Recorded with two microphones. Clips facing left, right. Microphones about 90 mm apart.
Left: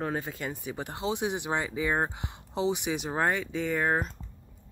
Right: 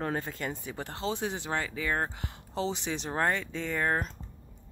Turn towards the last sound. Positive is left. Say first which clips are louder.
# left 2 dB
turn(degrees=10)  # may be behind; listen again after turning